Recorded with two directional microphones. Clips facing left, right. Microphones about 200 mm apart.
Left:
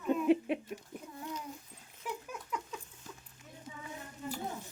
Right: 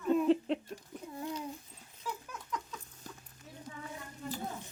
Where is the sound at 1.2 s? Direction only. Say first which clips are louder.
Right 4 dB; 30° right (ahead or behind).